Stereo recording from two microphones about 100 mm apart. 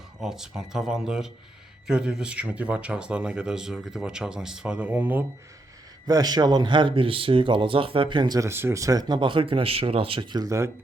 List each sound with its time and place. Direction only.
0.2 s speech: 5° right (ahead or behind)
6.1 s speech: 40° right (ahead or behind)
8.4 s speech: 25° right (ahead or behind); by 10.5 s 45° right (ahead or behind)